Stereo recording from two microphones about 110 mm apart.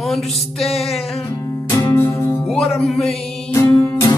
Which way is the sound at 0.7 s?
65° left (ahead or behind).